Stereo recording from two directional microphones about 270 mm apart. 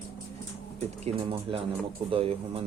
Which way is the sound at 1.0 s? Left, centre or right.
Centre.